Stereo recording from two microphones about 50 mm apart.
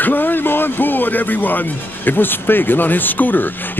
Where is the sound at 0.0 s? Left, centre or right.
Left.